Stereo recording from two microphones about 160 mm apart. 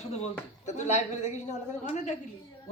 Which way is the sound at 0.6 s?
45° left (ahead or behind).